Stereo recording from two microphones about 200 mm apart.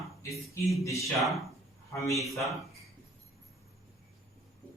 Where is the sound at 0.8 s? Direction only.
15° left (ahead or behind).